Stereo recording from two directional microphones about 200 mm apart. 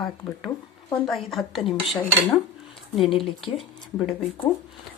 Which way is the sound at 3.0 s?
Centre (ahead or behind).